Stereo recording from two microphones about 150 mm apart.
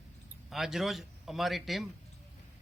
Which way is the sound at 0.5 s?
Centre (ahead or behind).